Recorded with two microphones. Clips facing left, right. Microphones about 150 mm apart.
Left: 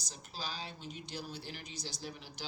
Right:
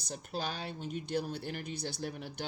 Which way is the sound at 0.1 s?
60° right (ahead or behind).